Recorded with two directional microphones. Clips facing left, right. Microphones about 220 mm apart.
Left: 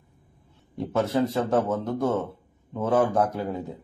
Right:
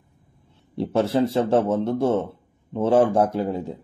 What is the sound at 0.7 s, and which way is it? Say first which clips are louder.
Speech: right 3 dB; 30° right (ahead or behind).